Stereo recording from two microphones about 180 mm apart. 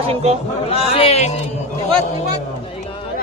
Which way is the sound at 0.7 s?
35° left (ahead or behind).